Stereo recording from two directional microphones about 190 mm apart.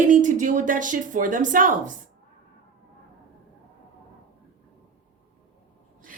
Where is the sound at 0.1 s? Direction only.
45° right (ahead or behind).